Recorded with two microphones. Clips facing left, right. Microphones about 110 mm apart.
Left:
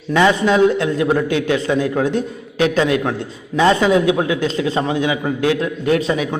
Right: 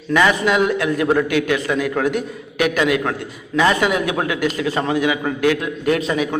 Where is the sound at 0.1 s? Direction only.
25° left (ahead or behind).